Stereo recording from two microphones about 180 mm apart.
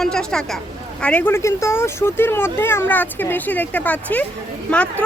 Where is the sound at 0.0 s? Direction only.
5° left (ahead or behind).